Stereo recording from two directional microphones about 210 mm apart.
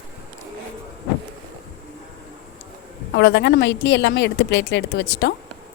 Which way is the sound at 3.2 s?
55° left (ahead or behind).